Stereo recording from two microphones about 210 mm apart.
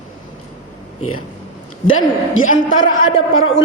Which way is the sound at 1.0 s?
90° left.